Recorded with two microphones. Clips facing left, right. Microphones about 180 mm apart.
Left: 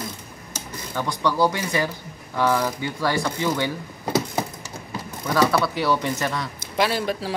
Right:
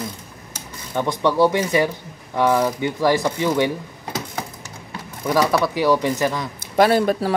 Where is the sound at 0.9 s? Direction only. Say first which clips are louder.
Right 4 dB; 25° right (ahead or behind).